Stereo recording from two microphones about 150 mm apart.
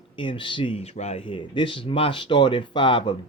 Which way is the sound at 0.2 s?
35° left (ahead or behind).